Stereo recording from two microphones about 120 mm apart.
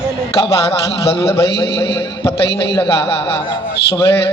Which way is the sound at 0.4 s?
55° left (ahead or behind).